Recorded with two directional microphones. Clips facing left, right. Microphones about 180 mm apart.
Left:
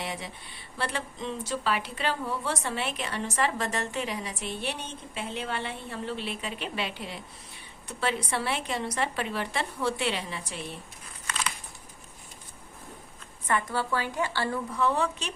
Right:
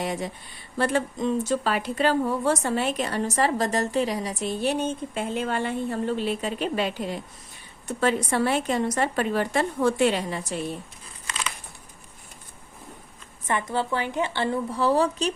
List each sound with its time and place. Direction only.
0.0 s a woman's voice: 45° right (ahead or behind)
13.5 s a woman's voice: 20° right (ahead or behind); by 15.3 s 35° right (ahead or behind)